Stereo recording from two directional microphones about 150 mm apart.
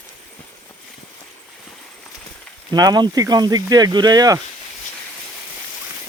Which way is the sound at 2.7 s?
25° right (ahead or behind).